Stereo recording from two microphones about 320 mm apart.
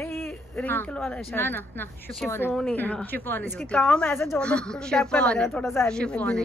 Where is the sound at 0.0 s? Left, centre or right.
Centre.